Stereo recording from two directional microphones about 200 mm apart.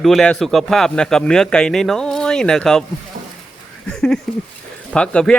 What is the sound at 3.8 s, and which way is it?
A man's voice, 5° left (ahead or behind).